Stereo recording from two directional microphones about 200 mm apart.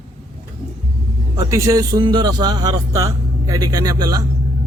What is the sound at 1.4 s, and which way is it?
A man's voice, 15° right (ahead or behind).